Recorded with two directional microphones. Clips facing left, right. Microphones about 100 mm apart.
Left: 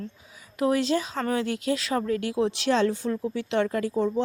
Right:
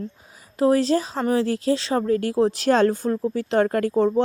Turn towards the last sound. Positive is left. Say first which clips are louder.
# right 5 dB
turn(degrees=-55)  # may be behind; listen again after turning